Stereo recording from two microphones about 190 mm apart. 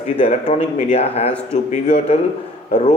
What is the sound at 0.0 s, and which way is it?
A man's voice, 35° left (ahead or behind).